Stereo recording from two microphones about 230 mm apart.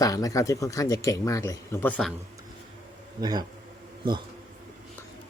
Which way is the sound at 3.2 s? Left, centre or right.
Centre.